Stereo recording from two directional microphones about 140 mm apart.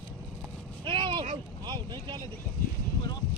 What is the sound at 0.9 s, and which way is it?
Vehicle, 35° right (ahead or behind).